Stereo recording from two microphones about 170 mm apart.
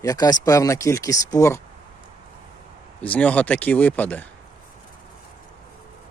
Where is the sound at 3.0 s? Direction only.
10° left (ahead or behind).